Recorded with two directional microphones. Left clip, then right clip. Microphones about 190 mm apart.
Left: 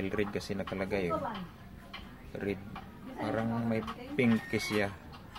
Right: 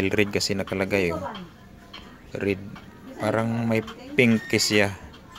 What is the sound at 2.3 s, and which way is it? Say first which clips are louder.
Speech: right 10 dB; 35° right (ahead or behind).